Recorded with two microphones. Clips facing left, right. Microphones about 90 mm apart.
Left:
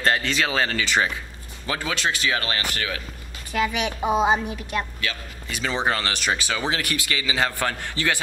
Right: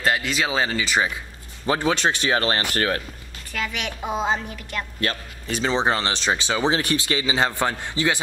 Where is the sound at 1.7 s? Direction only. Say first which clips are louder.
Right 5 dB; 25° right (ahead or behind).